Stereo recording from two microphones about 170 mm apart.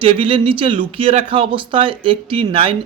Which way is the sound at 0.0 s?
30° right (ahead or behind).